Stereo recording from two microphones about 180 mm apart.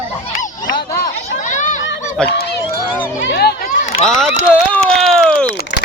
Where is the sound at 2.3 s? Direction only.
65° left (ahead or behind).